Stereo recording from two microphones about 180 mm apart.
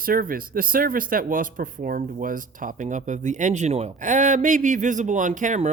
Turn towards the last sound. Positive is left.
turn(degrees=-45)  # may be behind; listen again after turning